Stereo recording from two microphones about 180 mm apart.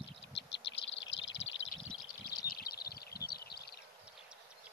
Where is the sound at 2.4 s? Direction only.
55° left (ahead or behind).